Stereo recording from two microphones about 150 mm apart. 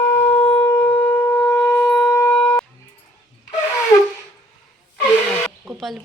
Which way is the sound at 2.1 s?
15° left (ahead or behind).